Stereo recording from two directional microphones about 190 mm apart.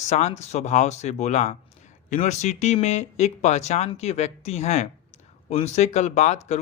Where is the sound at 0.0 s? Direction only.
35° left (ahead or behind).